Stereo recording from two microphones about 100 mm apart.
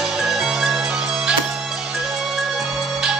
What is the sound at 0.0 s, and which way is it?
Music, 5° right (ahead or behind).